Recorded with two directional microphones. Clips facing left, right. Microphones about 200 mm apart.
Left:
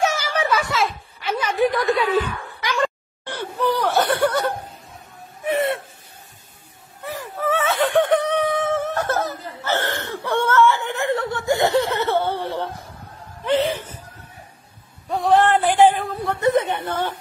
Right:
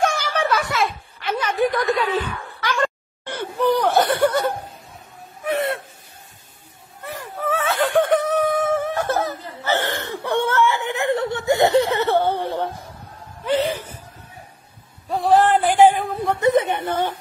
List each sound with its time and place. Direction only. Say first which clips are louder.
0.0 s a sound: even; 10° left (ahead or behind)
3.3 s wheeze: right 2 dB; 15° right (ahead or behind)
5.4 s gasp: left 1 dB; centre (ahead or behind)
7.1 s whimper: left 1 dB; centre (ahead or behind)
13.5 s chuckle: left 1 dB; centre (ahead or behind)
15.0 s a sound: right 1 dB; centre (ahead or behind)